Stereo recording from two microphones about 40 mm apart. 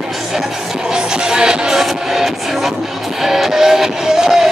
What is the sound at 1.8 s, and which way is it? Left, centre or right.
Music, centre.